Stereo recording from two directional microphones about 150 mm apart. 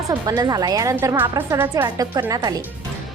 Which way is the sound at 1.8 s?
25° right (ahead or behind).